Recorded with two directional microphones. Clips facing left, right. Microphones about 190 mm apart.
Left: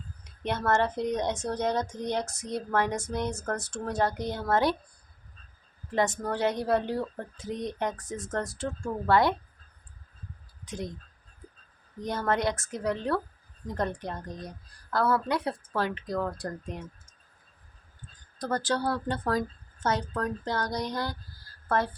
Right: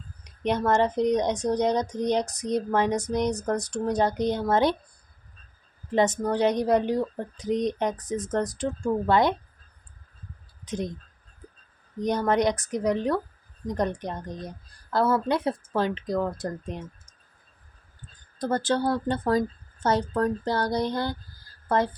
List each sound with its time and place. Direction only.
0.3 s speech: 15° right (ahead or behind)
5.9 s speech: 20° right (ahead or behind)
10.7 s speech: 20° right (ahead or behind)
11.9 s speech: 20° right (ahead or behind)
18.3 s speech: 25° right (ahead or behind)